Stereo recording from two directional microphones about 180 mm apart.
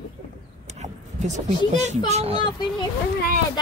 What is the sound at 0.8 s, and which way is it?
Speech, 40° right (ahead or behind).